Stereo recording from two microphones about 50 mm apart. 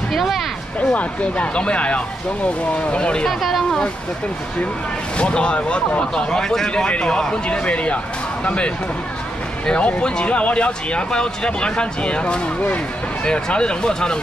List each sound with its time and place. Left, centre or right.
0.1 s speech: centre
0.7 s speech: left
3.3 s speech: centre
5.1 s speech: left